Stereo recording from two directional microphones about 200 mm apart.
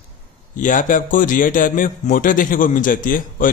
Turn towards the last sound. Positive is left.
turn(degrees=45)  # may be behind; listen again after turning